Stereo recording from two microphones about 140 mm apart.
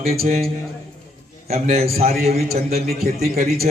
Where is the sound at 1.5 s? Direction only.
50° right (ahead or behind).